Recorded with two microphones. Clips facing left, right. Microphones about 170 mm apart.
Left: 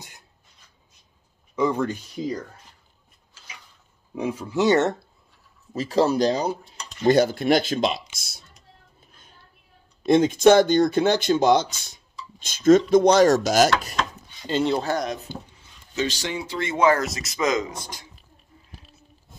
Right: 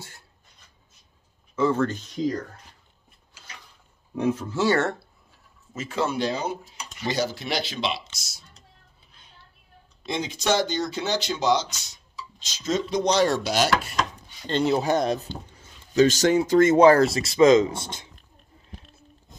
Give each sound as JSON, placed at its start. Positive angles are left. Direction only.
{"t": 1.5, "sound": "speech", "side_deg": 15}
{"t": 4.1, "sound": "speech", "side_deg": 10}
{"t": 5.7, "sound": "speech", "side_deg": 35}
{"t": 7.0, "sound": "speech", "side_deg": 55}
{"t": 9.0, "sound": "a sound", "side_deg": 45}
{"t": 10.0, "sound": "speech", "side_deg": 50}
{"t": 14.5, "sound": "speech", "side_deg": 0}
{"t": 15.3, "sound": "speech", "side_deg": 10}
{"t": 15.9, "sound": "speech", "side_deg": -40}
{"t": 18.8, "sound": "a sound", "side_deg": 0}